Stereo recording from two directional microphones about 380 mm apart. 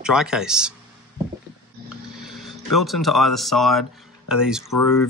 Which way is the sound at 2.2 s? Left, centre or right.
Centre.